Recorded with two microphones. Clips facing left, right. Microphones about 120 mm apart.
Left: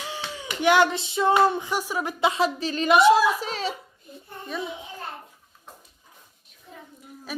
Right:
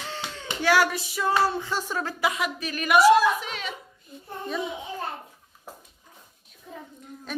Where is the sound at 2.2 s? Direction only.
30° left (ahead or behind).